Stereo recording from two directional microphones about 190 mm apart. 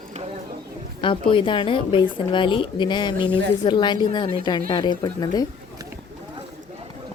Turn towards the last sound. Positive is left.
turn(degrees=20)  # may be behind; listen again after turning